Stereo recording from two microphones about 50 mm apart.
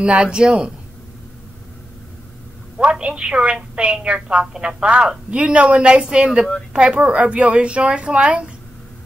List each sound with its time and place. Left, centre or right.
0.0 s a woman's voice: right
2.8 s a woman's voice: centre